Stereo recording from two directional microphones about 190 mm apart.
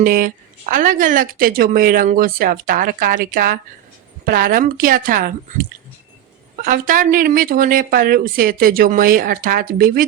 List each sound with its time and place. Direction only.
0.0 s speech: 45° right (ahead or behind)
6.6 s speech: 45° right (ahead or behind)